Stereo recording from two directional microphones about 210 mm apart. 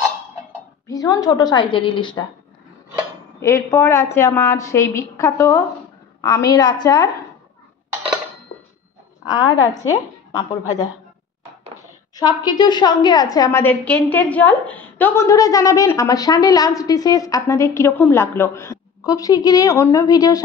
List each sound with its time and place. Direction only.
0.8 s a woman's voice: 15° left (ahead or behind)
3.3 s a woman's voice: 15° left (ahead or behind)
9.2 s a woman's voice: 20° left (ahead or behind)
12.2 s a woman's voice: 20° left (ahead or behind)